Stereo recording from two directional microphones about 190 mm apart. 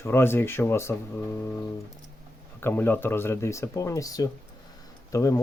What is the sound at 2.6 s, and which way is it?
Speech, 10° left (ahead or behind).